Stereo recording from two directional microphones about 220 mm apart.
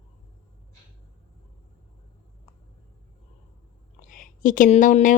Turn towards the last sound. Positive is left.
turn(degrees=35)  # may be behind; listen again after turning